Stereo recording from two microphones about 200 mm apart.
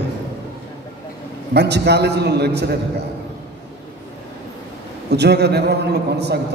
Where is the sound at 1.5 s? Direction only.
55° right (ahead or behind).